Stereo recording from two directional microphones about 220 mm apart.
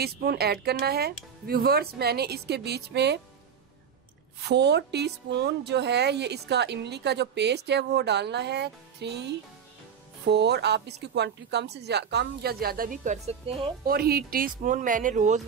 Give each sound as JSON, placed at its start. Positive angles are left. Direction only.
{"t": 0.0, "sound": "a woman's voice", "side_deg": -45}
{"t": 4.4, "sound": "a woman's voice", "side_deg": -50}
{"t": 13.8, "sound": "speech", "side_deg": -45}